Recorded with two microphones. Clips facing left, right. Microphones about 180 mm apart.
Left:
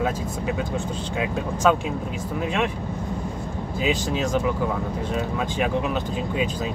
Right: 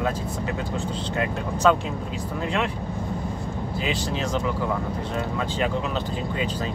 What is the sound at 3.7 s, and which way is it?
Speech, 10° left (ahead or behind).